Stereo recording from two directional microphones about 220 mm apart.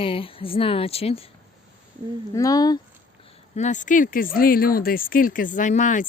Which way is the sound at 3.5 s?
35° left (ahead or behind).